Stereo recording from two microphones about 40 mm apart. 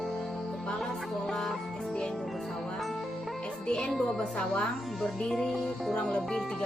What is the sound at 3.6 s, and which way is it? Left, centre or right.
Music, centre.